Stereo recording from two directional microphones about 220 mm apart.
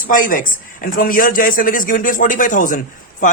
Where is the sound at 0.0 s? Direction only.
35° left (ahead or behind).